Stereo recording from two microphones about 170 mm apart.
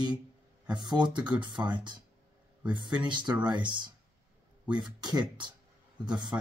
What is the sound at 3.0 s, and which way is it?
Speech, 25° right (ahead or behind).